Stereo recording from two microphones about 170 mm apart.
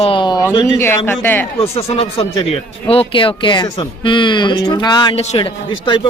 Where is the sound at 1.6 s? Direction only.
35° left (ahead or behind).